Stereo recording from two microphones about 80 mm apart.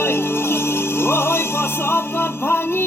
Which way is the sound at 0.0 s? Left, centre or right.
Left.